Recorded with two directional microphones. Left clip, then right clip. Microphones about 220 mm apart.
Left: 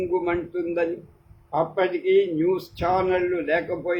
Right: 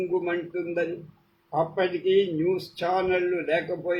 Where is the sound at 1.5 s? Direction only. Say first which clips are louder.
Left 2 dB; 15° left (ahead or behind).